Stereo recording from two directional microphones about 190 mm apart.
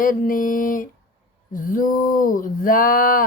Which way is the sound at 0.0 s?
45° left (ahead or behind).